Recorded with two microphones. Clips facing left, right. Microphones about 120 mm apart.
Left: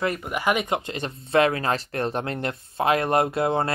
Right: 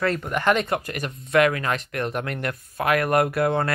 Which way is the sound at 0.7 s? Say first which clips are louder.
Even; 25° left (ahead or behind).